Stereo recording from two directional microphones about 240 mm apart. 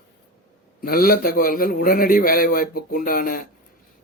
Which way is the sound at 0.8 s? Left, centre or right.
Left.